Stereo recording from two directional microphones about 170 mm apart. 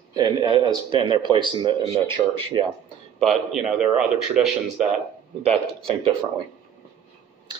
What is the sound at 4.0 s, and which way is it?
Speech, 5° right (ahead or behind).